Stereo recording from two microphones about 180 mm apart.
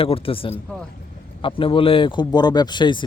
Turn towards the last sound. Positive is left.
turn(degrees=25)  # may be behind; listen again after turning